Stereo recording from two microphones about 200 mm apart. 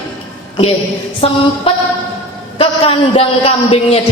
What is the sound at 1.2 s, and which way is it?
A man's voice, 30° left (ahead or behind).